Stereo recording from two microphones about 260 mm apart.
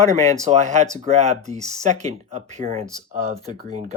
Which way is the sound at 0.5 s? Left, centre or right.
Right.